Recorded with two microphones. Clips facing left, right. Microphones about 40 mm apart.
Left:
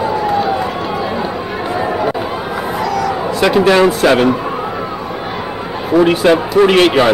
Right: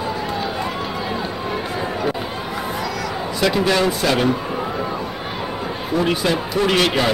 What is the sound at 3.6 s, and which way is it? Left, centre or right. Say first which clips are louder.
Speech: left 9 dB; left.